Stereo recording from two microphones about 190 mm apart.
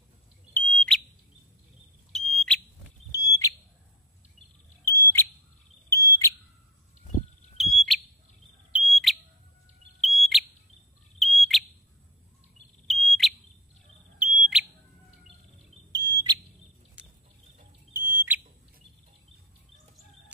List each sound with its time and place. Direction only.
0.5 s bird: 5° left (ahead or behind)
2.1 s smoke detector: 5° left (ahead or behind)
3.1 s fire alarm: 15° left (ahead or behind)
4.8 s bird: 15° left (ahead or behind)
5.9 s smoke detector: 15° left (ahead or behind)
7.5 s smoke detector: centre (ahead or behind)
8.7 s fire alarm: centre (ahead or behind)
9.9 s bird: centre (ahead or behind)
11.1 s smoke detector: centre (ahead or behind)
12.8 s smoke detector: centre (ahead or behind)
15.9 s smoke detector: 20° right (ahead or behind)
17.0 s a sound: 5° right (ahead or behind)
17.9 s fire alarm: 10° right (ahead or behind)